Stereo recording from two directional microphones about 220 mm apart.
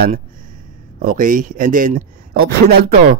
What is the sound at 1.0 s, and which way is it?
Speech, 40° right (ahead or behind).